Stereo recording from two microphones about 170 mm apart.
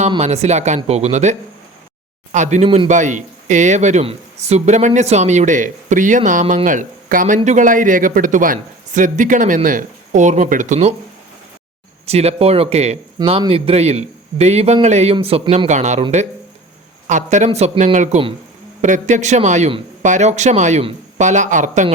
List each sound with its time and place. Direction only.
0.2 s a man's voice: 40° right (ahead or behind)
12.0 s a man's voice: 35° right (ahead or behind)
13.1 s a man's voice: 30° right (ahead or behind)
17.1 s speech: 45° right (ahead or behind)